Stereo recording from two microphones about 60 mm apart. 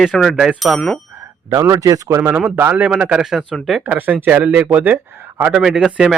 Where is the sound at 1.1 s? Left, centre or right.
Right.